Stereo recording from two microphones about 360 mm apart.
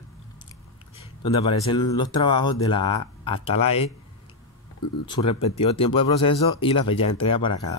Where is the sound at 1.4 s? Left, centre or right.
Centre.